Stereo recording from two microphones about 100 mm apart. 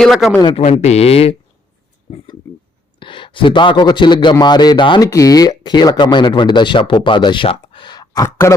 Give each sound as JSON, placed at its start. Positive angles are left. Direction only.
{"t": 0.0, "sound": "a man's voice", "side_deg": 0}
{"t": 0.5, "sound": "speech", "side_deg": 80}
{"t": 3.0, "sound": "speech", "side_deg": 55}
{"t": 5.0, "sound": "speech", "side_deg": 35}
{"t": 7.4, "sound": "a sound", "side_deg": 65}